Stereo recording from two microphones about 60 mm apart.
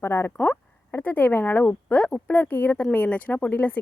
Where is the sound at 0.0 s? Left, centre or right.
Left.